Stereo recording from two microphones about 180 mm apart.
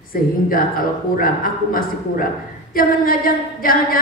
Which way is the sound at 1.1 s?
50° left (ahead or behind).